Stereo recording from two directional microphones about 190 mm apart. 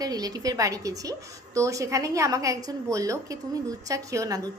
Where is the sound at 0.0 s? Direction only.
20° right (ahead or behind).